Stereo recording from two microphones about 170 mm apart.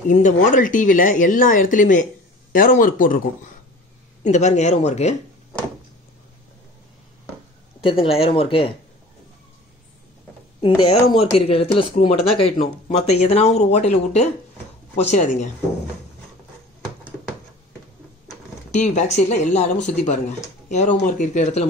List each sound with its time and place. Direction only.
0.1 s speech: 45° left (ahead or behind)
4.2 s speech: 45° left (ahead or behind)
7.8 s speech: 30° left (ahead or behind)
10.8 s speech: 35° left (ahead or behind)
18.7 s speech: 45° left (ahead or behind)